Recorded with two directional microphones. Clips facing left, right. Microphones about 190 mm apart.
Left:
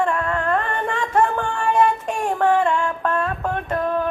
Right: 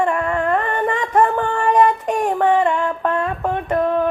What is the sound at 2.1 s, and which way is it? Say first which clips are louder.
Synthetic singing: right 3 dB; 20° right (ahead or behind).